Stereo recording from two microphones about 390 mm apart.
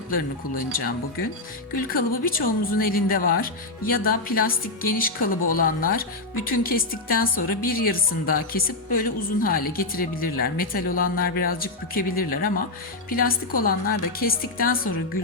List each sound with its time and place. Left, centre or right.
0.1 s speech: left